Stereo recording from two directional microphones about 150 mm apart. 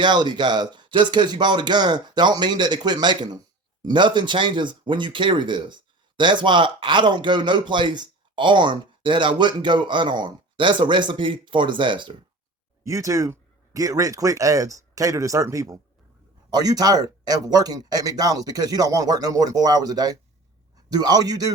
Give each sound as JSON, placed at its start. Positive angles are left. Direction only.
{"t": 0.0, "sound": "speech", "side_deg": -30}
{"t": 12.8, "sound": "speech", "side_deg": -20}